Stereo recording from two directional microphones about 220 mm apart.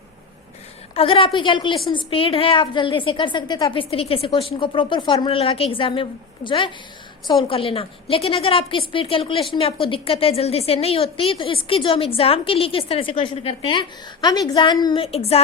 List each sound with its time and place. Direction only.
0.9 s a woman's voice: 25° left (ahead or behind)